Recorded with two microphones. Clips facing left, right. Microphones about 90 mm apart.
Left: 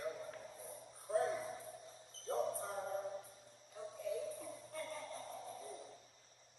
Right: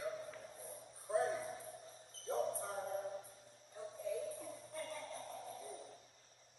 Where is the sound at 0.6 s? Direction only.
Centre (ahead or behind).